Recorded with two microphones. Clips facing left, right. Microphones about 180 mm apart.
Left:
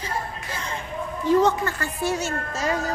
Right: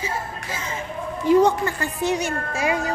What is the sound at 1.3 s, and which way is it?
Speech, 15° right (ahead or behind).